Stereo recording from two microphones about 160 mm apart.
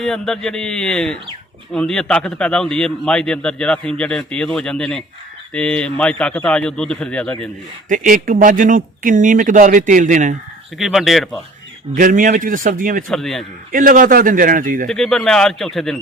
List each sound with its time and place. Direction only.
0.0 s a man's voice: 5° left (ahead or behind)
7.9 s speech: 55° right (ahead or behind)
10.8 s a man's voice: centre (ahead or behind)
11.9 s a man's voice: 55° right (ahead or behind)
13.1 s a man's voice: centre (ahead or behind)
13.7 s a man's voice: 55° right (ahead or behind)
14.8 s a man's voice: centre (ahead or behind)